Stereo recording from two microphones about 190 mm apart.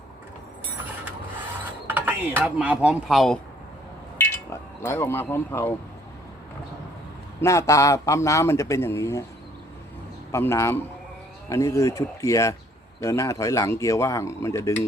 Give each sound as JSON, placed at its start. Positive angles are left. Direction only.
{"t": 1.9, "sound": "speech", "side_deg": -10}
{"t": 4.2, "sound": "speech", "side_deg": 15}
{"t": 7.4, "sound": "a man's voice", "side_deg": 15}
{"t": 10.3, "sound": "a man's voice", "side_deg": 15}